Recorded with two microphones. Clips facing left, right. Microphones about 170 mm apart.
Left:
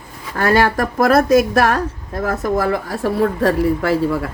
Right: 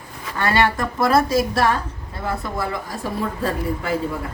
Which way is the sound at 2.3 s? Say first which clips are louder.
Left 7 dB; 45° left (ahead or behind).